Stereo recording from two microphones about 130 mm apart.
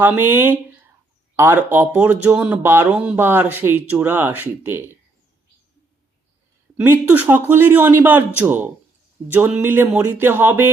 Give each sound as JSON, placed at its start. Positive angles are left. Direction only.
{"t": 0.0, "sound": "speech", "side_deg": -15}
{"t": 6.7, "sound": "speech", "side_deg": -15}